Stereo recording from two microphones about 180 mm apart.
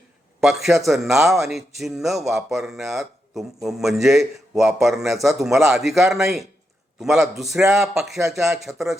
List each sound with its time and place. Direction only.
0.3 s a man's voice: centre (ahead or behind)